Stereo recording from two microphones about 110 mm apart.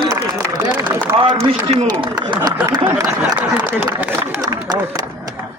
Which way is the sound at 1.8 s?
45° right (ahead or behind).